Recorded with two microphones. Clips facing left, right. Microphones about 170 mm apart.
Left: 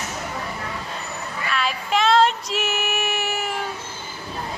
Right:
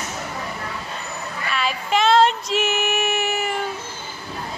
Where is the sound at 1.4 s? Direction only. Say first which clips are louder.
Right 1 dB; centre (ahead or behind).